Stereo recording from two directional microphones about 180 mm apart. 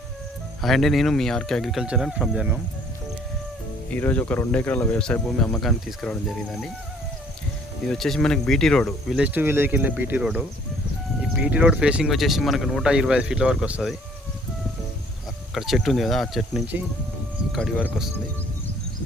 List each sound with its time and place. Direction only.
0.6 s speech: centre (ahead or behind)
3.8 s speech: 10° left (ahead or behind)
7.9 s speech: centre (ahead or behind)
15.5 s speech: centre (ahead or behind)